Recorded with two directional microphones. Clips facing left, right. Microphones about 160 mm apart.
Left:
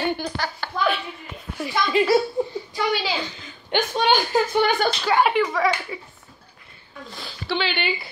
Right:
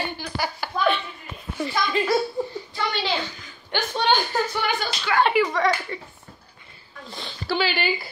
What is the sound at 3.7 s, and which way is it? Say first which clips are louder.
Speech: left 2 dB; 10° left (ahead or behind).